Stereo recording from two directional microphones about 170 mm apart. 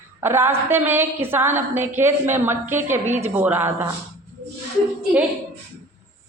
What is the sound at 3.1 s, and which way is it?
Speech, 45° right (ahead or behind).